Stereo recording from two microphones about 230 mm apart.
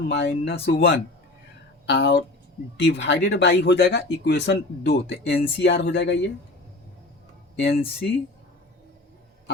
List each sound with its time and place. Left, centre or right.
0.1 s speech: left
7.6 s speech: left